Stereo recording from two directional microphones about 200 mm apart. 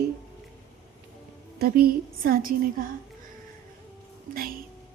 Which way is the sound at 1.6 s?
50° right (ahead or behind).